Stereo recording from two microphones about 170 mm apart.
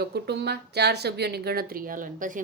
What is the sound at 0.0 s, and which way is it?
Speech, 70° right (ahead or behind).